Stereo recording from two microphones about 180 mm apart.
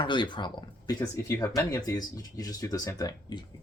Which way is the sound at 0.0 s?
25° left (ahead or behind).